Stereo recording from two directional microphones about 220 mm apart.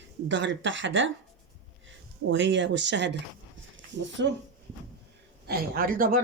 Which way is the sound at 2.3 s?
55° right (ahead or behind).